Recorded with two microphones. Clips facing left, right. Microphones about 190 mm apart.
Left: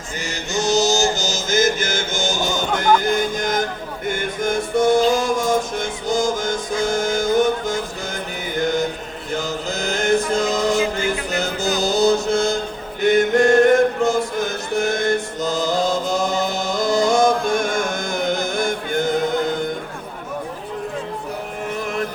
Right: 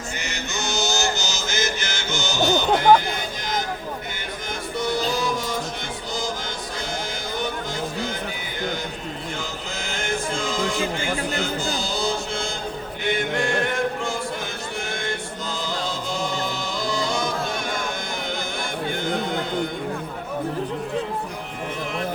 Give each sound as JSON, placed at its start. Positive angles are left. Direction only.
{"t": 0.5, "sound": "music", "side_deg": 40}
{"t": 9.3, "sound": "music", "side_deg": 40}
{"t": 13.0, "sound": "chant", "side_deg": 45}